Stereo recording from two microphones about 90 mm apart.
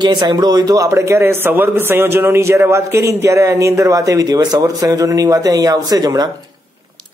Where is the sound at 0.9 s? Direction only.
30° right (ahead or behind); by 6.3 s 45° right (ahead or behind).